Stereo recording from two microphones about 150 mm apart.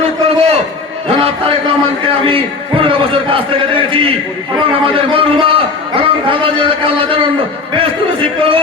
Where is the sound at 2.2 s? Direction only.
35° right (ahead or behind).